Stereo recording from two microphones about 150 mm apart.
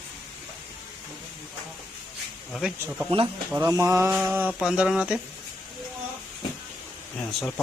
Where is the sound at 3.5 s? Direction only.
20° right (ahead or behind).